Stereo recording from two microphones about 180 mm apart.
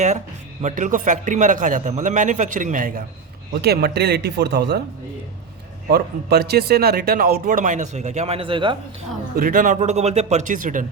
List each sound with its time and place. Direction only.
0.6 s speech: 45° right (ahead or behind)
3.6 s speech: 65° right (ahead or behind)
5.9 s speech: 65° right (ahead or behind); by 8.7 s 30° right (ahead or behind)
9.3 s speech: 50° right (ahead or behind)